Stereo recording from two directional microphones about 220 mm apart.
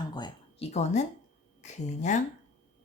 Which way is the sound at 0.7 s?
30° left (ahead or behind).